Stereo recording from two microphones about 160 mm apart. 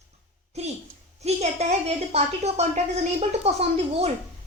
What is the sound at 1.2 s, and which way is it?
Speech, 40° right (ahead or behind).